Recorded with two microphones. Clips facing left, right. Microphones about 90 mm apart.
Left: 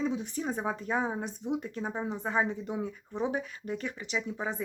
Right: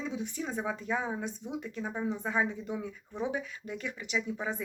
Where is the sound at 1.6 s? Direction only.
40° left (ahead or behind).